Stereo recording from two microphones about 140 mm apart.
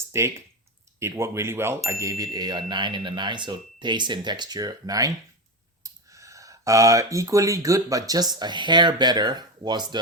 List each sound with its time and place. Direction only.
0.1 s speech: 20° right (ahead or behind)